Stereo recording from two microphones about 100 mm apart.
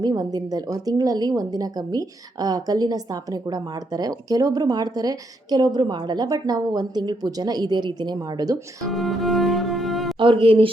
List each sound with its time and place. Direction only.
0.0 s a woman's voice: 40° right (ahead or behind)
8.9 s music: centre (ahead or behind)
10.2 s speech: 60° right (ahead or behind)